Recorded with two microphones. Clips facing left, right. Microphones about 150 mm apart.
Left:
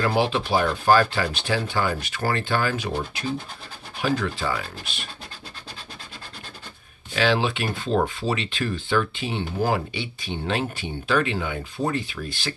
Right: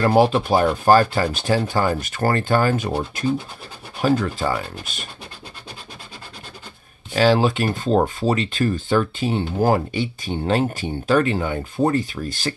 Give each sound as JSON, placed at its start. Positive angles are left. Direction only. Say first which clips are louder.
{"t": 0.0, "sound": "speech", "louder": "right 6 dB", "side_deg": -45}
{"t": 7.2, "sound": "speech", "louder": "right 5 dB", "side_deg": -40}